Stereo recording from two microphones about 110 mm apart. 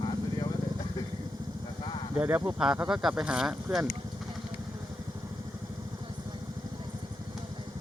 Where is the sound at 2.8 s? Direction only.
5° right (ahead or behind).